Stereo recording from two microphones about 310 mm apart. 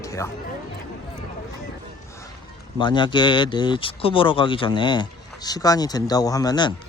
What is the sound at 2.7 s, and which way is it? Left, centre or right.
Speech, centre.